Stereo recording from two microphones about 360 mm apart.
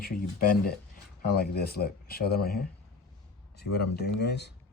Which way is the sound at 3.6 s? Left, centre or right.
Left.